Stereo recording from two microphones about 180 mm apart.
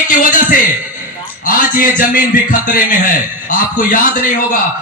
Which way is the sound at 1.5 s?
50° left (ahead or behind).